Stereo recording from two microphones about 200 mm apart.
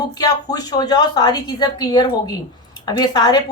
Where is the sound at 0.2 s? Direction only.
20° left (ahead or behind).